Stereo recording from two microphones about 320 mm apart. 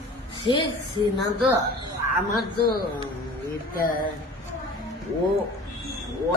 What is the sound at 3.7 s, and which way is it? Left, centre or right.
Speech, left.